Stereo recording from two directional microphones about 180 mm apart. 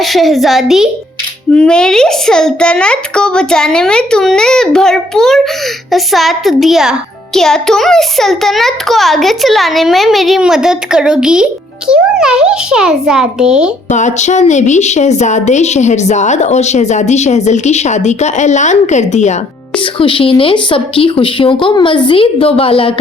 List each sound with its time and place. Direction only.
0.0 s a child's voice: centre (ahead or behind)
13.9 s a woman's voice: 40° left (ahead or behind)
20.0 s speech: 30° left (ahead or behind)